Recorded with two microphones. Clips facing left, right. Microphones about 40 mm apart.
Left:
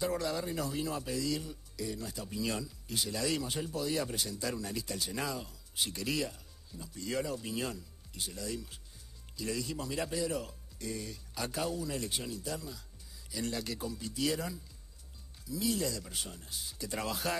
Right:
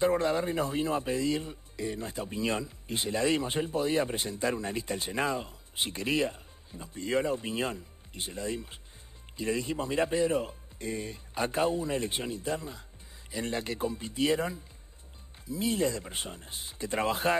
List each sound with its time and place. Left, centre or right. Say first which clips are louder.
0.0 s speech: right 7 dB; right